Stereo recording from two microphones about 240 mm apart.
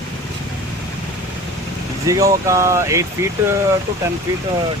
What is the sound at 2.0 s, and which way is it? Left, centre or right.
Speech, centre.